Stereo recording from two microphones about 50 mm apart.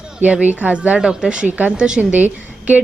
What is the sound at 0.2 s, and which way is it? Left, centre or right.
Speech, right.